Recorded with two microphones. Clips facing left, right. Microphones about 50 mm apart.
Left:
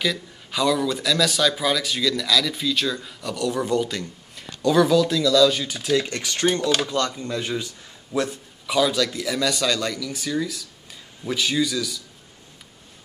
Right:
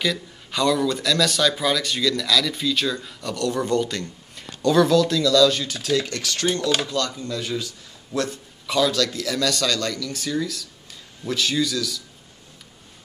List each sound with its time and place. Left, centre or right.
0.0 s a man's voice: centre
7.2 s a man's voice: left